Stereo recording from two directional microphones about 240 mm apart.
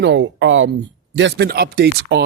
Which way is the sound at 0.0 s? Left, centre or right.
Right.